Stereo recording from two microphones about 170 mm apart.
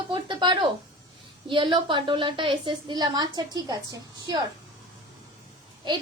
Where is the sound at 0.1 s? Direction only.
25° right (ahead or behind).